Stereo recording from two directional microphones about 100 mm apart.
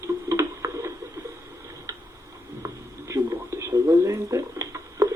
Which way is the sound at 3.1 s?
35° right (ahead or behind).